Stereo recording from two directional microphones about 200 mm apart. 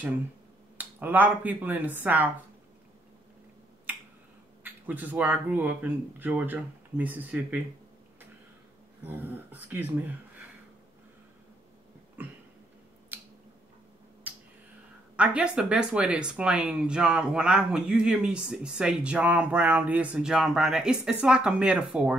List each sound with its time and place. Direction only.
0.7 s speech: 10° right (ahead or behind)
4.6 s speech: 10° right (ahead or behind)
9.0 s speech: 10° right (ahead or behind)
12.2 s a sound: 10° right (ahead or behind)
13.1 s squish: 10° right (ahead or behind)
14.3 s finger snapping: 10° right (ahead or behind)
15.1 s speech: 5° right (ahead or behind)